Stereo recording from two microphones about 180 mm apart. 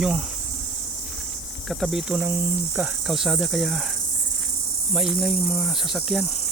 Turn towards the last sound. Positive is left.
turn(degrees=0)  # may be behind; listen again after turning